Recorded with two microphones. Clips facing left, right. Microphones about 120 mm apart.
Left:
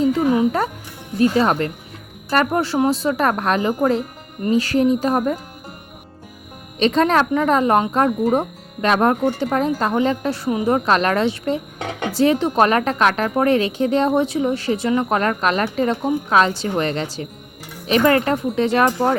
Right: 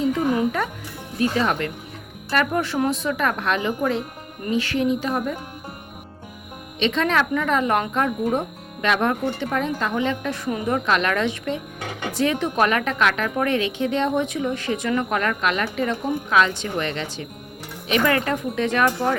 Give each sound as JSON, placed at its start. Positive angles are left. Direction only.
{"t": 1.2, "sound": "a woman's voice", "side_deg": 35}
{"t": 6.7, "sound": "a woman's voice", "side_deg": 40}